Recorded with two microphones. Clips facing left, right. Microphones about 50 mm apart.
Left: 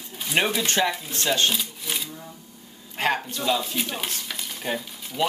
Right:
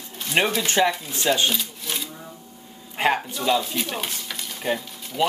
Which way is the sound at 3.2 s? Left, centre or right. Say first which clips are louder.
Right 3 dB; centre.